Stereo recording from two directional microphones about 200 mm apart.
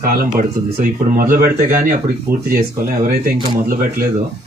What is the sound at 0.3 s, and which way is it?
Speech, 45° right (ahead or behind).